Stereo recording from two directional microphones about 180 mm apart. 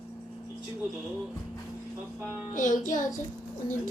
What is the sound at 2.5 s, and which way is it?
Music, 45° left (ahead or behind).